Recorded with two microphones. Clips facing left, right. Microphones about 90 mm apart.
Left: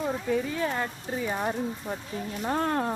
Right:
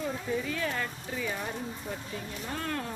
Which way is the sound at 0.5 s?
30° left (ahead or behind).